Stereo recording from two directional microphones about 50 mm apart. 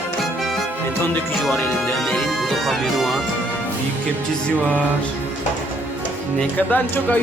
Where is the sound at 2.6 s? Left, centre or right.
Centre.